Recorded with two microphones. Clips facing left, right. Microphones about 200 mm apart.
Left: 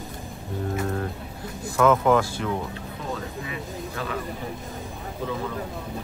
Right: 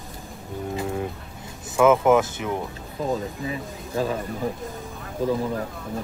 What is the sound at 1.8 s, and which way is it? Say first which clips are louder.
Speech: right 2 dB; 20° right (ahead or behind).